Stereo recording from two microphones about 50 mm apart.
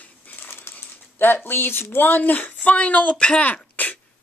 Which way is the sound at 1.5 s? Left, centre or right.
Left.